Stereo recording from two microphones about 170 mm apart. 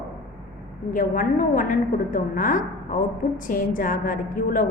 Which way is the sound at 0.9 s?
50° left (ahead or behind).